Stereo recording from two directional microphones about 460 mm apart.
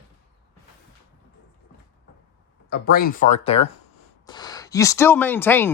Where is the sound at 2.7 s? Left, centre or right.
Centre.